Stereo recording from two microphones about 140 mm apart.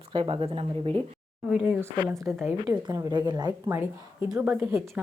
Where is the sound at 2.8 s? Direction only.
30° right (ahead or behind).